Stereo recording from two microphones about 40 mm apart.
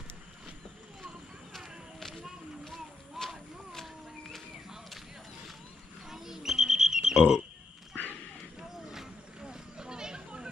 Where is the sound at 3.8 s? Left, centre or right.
Centre.